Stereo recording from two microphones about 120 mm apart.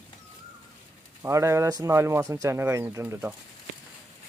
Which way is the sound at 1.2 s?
25° right (ahead or behind).